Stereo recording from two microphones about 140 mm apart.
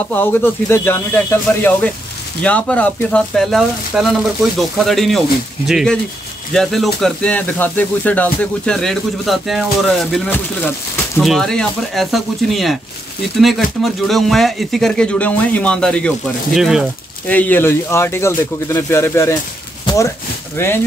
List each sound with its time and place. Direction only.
0.1 s speech: 15° left (ahead or behind); by 16.8 s centre (ahead or behind)
17.3 s speech: 10° left (ahead or behind)
20.5 s speech: 15° left (ahead or behind)